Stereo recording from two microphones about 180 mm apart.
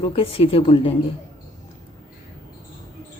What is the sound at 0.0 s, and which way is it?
Speech, 30° left (ahead or behind).